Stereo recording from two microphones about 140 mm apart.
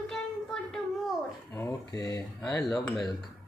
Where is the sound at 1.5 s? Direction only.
25° left (ahead or behind).